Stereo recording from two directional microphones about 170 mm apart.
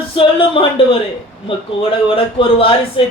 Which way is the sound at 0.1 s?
35° left (ahead or behind).